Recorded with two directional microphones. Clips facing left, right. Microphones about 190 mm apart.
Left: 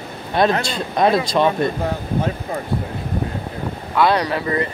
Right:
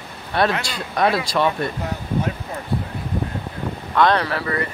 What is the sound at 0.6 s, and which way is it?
Speech, 25° left (ahead or behind).